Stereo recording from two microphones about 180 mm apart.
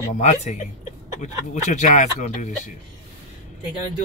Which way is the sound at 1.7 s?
40° left (ahead or behind).